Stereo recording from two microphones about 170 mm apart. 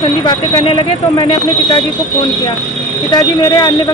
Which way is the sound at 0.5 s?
35° left (ahead or behind).